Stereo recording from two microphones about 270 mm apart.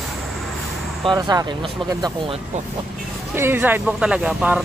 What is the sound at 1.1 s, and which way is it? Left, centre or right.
Speech, centre.